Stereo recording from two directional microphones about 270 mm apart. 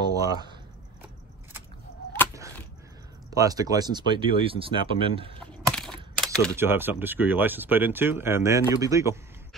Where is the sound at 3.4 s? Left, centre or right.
Centre.